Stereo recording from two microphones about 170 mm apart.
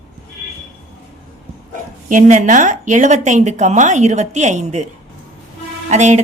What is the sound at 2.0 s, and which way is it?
Speech, 45° right (ahead or behind).